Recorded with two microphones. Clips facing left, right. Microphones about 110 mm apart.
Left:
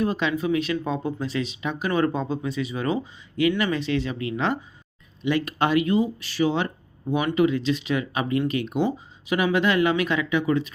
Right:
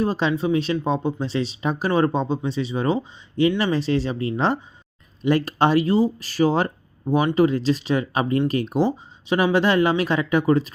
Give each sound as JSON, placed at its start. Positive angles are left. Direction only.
{"t": 0.0, "sound": "speech", "side_deg": -30}